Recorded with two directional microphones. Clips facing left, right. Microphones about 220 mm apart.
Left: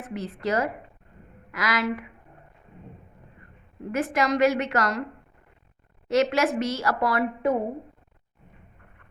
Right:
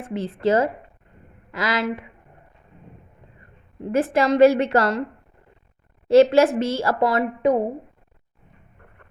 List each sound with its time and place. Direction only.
0.0 s a woman's voice: 30° right (ahead or behind)
3.9 s a woman's voice: 30° right (ahead or behind)
6.1 s a woman's voice: 30° right (ahead or behind)